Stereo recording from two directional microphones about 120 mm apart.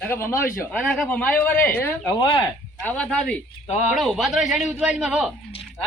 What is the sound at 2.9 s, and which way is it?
Speech, 10° left (ahead or behind).